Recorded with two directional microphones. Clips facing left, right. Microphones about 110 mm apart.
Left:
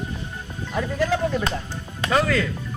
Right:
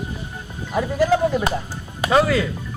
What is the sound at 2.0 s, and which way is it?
Speech, 15° right (ahead or behind).